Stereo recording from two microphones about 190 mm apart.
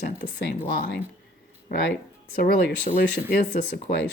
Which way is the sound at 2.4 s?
55° left (ahead or behind).